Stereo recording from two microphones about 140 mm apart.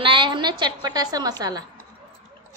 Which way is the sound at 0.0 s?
35° right (ahead or behind).